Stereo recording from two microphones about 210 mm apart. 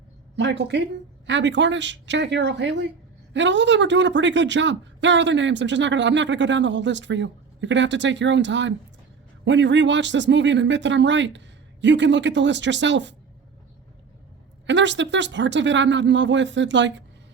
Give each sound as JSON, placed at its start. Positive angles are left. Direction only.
{"t": 0.3, "sound": "speech", "side_deg": -55}
{"t": 14.7, "sound": "speech", "side_deg": -60}